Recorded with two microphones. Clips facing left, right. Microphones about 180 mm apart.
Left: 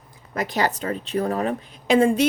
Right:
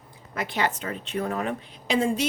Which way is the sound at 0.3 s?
40° left (ahead or behind).